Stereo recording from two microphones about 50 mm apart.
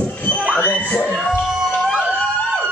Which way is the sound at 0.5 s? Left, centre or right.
Left.